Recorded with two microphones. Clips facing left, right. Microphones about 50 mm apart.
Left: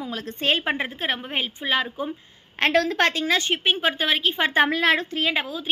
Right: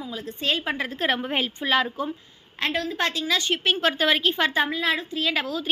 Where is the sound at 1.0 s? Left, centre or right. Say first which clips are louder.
Right 2 dB; centre.